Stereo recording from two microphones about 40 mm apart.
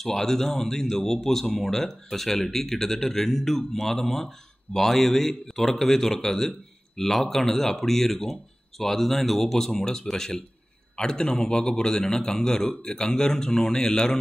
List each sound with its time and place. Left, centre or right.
0.0 s a man's voice: centre